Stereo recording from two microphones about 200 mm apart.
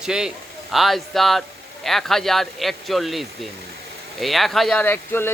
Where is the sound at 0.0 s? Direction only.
5° right (ahead or behind).